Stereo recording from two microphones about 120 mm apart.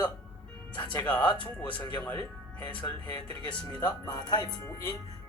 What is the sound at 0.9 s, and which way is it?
Speech, 10° left (ahead or behind).